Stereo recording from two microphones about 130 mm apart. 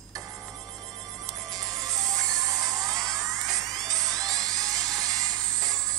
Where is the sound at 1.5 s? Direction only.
30° right (ahead or behind).